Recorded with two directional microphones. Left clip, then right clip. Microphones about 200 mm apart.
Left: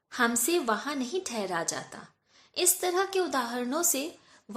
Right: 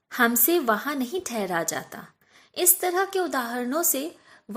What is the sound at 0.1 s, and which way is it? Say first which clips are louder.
A woman's voice: right 5 dB; 30° right (ahead or behind).